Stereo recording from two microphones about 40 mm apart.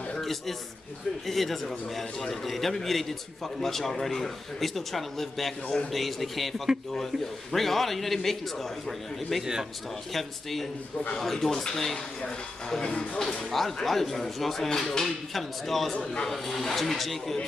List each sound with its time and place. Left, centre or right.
0.2 s a man's voice: centre
9.4 s a man's voice: centre
10.1 s speech: centre
13.1 s speech: centre
13.5 s speech: centre
15.9 s speech: centre